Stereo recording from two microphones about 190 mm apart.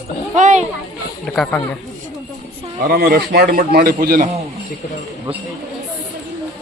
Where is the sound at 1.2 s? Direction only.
5° left (ahead or behind).